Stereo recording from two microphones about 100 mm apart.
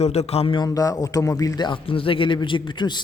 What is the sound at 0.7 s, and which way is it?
Speech, 35° left (ahead or behind).